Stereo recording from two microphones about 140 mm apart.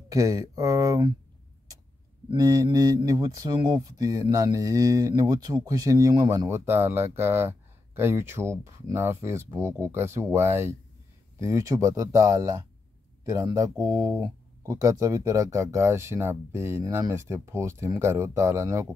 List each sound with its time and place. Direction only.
0.1 s speech: 25° right (ahead or behind)
2.3 s speech: 25° right (ahead or behind)